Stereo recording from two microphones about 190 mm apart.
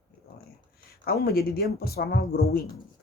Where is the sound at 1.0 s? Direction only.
55° left (ahead or behind).